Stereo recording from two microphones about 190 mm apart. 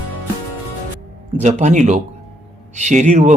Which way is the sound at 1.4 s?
40° right (ahead or behind).